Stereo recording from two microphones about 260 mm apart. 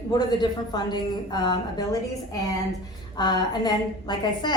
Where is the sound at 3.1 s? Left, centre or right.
Centre.